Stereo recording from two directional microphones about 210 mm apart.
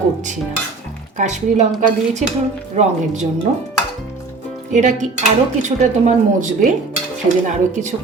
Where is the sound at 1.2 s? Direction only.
35° right (ahead or behind).